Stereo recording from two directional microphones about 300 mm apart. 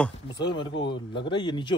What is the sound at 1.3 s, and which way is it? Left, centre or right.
Speech, centre.